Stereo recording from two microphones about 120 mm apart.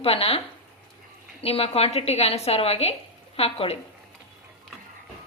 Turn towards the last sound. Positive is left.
turn(degrees=55)  # may be behind; listen again after turning